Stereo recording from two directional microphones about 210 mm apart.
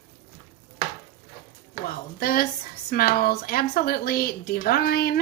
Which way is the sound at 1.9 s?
45° left (ahead or behind).